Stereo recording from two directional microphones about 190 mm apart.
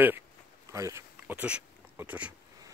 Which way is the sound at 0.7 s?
15° right (ahead or behind).